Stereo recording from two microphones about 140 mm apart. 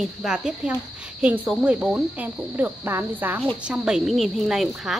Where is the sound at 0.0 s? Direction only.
5° right (ahead or behind).